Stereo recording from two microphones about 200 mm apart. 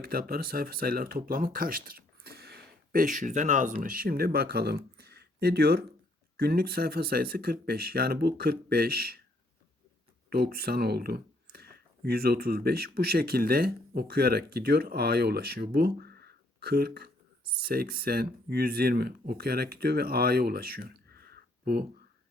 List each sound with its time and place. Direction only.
0.0 s speech: 50° right (ahead or behind)
10.2 s speech: 50° right (ahead or behind)